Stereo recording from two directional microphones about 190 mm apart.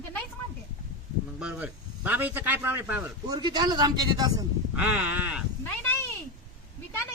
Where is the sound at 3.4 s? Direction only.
20° right (ahead or behind).